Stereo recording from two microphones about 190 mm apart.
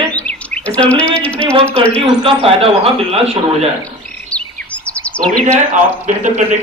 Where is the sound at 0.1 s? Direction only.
5° left (ahead or behind).